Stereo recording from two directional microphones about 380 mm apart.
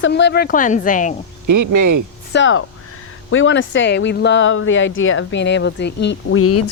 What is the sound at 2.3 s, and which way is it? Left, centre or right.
Speech, left.